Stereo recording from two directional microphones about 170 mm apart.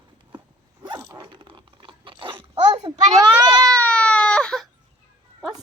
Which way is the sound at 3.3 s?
20° right (ahead or behind).